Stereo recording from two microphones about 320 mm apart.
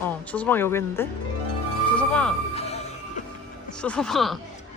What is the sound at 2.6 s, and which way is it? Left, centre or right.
Music, centre.